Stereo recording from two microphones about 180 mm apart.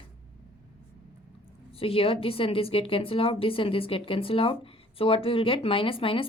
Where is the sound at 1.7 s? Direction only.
30° left (ahead or behind).